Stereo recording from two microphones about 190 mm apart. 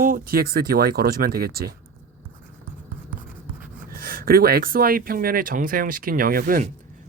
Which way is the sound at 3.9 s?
50° right (ahead or behind).